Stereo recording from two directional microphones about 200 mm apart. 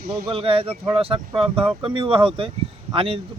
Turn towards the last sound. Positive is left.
turn(degrees=-25)  # may be behind; listen again after turning